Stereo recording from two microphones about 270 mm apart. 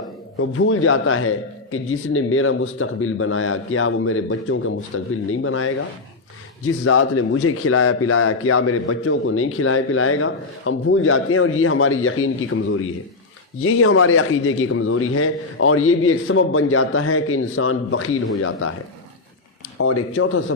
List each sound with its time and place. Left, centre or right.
0.3 s a man's voice: left
6.8 s a man's voice: left
13.6 s a man's voice: left
19.8 s a man's voice: left